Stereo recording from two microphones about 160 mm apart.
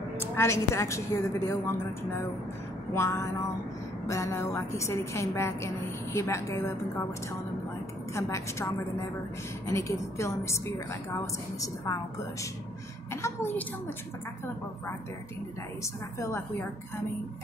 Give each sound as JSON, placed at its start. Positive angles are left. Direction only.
{"t": 0.2, "sound": "a woman's voice", "side_deg": 15}
{"t": 15.8, "sound": "a woman's voice", "side_deg": 15}